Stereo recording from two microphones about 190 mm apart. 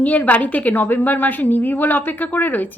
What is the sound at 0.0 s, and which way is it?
A woman's voice, 10° left (ahead or behind).